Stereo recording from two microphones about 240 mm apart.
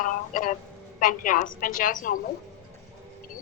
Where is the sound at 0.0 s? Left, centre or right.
Left.